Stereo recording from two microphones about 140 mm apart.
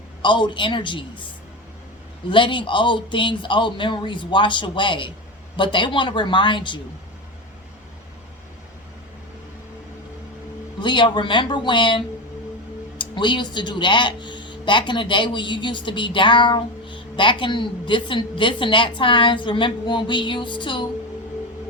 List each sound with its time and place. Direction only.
0.2 s speech: 35° left (ahead or behind)
2.3 s speech: 35° left (ahead or behind)
10.8 s speech: 35° left (ahead or behind)